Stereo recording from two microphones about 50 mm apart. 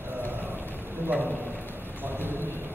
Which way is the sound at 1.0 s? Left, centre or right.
Right.